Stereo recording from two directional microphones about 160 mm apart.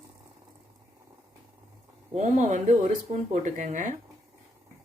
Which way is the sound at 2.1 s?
45° right (ahead or behind).